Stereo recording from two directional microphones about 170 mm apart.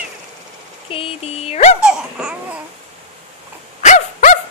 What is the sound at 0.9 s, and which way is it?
Dog, 35° left (ahead or behind).